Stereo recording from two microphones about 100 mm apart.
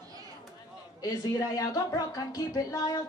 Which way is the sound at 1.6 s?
35° left (ahead or behind).